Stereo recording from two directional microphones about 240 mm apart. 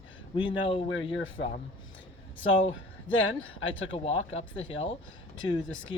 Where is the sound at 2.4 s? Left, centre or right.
Left.